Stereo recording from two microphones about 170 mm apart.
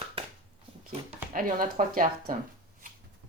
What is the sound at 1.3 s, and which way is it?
Speech, 55° right (ahead or behind).